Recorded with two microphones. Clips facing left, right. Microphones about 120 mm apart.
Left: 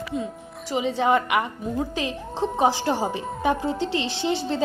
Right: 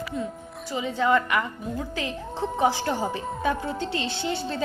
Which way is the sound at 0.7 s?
20° left (ahead or behind).